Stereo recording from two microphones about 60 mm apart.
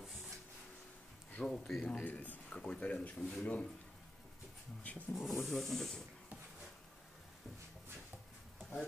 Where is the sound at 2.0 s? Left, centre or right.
Left.